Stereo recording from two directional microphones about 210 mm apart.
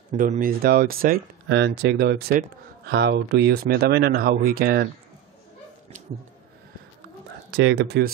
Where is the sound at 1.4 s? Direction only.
55° right (ahead or behind).